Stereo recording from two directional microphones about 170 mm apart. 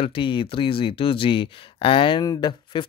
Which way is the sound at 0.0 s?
30° left (ahead or behind).